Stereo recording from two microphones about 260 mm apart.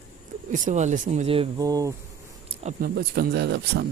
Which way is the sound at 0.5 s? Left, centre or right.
Right.